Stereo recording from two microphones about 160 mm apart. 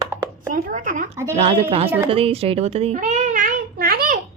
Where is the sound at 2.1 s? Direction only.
35° right (ahead or behind).